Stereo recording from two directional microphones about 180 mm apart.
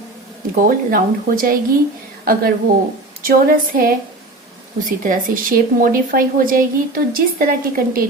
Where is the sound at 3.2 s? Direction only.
55° right (ahead or behind).